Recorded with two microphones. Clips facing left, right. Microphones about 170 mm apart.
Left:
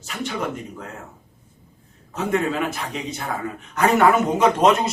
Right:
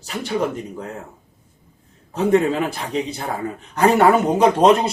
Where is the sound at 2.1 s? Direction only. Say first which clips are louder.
Right 5 dB; 35° right (ahead or behind).